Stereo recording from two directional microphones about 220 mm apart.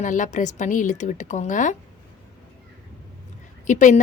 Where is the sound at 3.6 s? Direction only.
35° left (ahead or behind).